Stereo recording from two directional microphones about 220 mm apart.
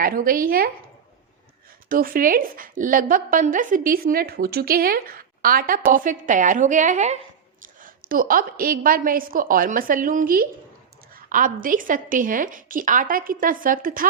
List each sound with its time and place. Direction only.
0.0 s a woman's voice: 40° right (ahead or behind)
1.9 s a woman's voice: 40° right (ahead or behind)